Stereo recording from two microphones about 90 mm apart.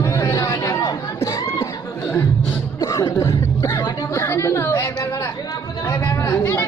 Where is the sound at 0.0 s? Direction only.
30° left (ahead or behind).